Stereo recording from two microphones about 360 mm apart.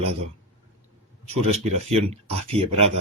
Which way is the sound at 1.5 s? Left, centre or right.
Centre.